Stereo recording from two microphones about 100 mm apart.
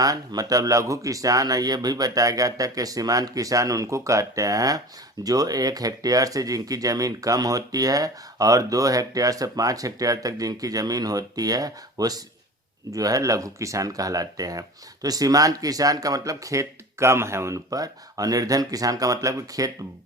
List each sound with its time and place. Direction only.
0.0 s speech: 40° right (ahead or behind)